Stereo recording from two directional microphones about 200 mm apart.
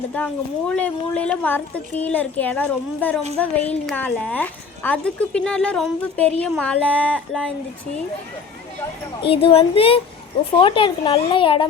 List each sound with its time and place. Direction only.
0.2 s a woman's voice: 10° left (ahead or behind)
9.3 s speech: 30° left (ahead or behind)